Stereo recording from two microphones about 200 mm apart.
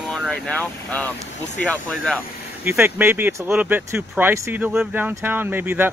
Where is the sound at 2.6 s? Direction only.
10° right (ahead or behind).